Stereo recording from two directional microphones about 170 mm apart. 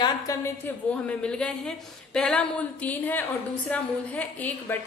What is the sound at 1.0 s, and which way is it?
A woman's voice, 5° left (ahead or behind).